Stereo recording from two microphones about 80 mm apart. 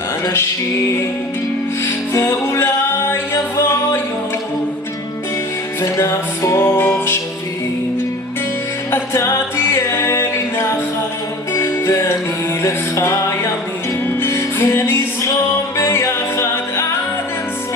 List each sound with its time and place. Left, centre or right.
1.8 s music: left
5.8 s music: left
8.9 s a capella: left
11.5 s music: left